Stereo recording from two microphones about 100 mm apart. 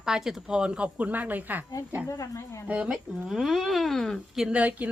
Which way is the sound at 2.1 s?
30° left (ahead or behind).